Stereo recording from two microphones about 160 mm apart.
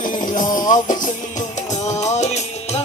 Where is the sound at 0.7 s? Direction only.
55° left (ahead or behind).